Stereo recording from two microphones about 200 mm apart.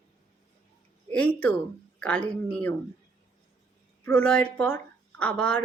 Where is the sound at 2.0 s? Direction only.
5° left (ahead or behind).